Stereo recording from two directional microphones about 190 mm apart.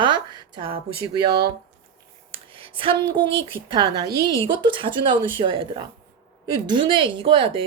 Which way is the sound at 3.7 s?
20° right (ahead or behind).